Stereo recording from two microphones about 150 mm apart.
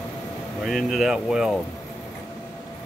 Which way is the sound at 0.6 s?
Centre (ahead or behind).